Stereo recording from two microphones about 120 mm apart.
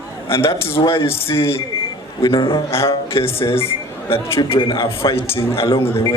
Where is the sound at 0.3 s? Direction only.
50° left (ahead or behind).